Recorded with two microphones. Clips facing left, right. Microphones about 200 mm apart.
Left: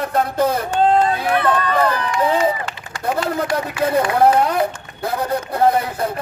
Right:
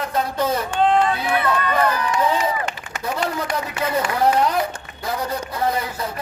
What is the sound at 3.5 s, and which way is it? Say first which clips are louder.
Speech: left 7 dB; 55° left (ahead or behind).